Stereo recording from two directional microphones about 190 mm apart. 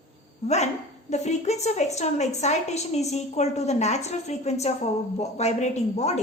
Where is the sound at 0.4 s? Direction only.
35° left (ahead or behind).